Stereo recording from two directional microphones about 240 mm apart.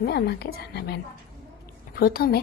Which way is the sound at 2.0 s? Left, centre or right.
Left.